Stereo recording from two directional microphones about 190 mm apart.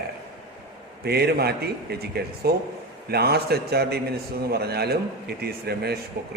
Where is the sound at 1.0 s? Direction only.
55° right (ahead or behind).